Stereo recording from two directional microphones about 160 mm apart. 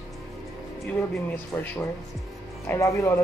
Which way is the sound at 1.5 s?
15° left (ahead or behind).